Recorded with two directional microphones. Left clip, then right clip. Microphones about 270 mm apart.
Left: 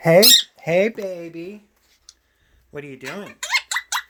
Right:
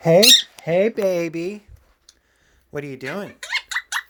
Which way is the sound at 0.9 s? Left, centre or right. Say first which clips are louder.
Right 8 dB; right.